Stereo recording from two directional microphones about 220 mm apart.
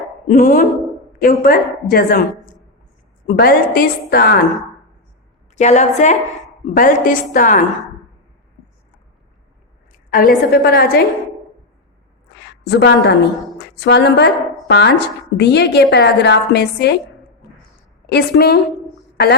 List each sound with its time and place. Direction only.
0.3 s a woman's voice: 35° left (ahead or behind)
5.5 s a woman's voice: 30° left (ahead or behind)
10.1 s a woman's voice: 40° left (ahead or behind)
12.4 s a woman's voice: 50° left (ahead or behind)
18.0 s a woman's voice: 45° left (ahead or behind)